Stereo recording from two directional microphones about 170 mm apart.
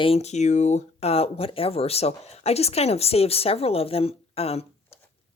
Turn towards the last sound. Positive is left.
turn(degrees=35)  # may be behind; listen again after turning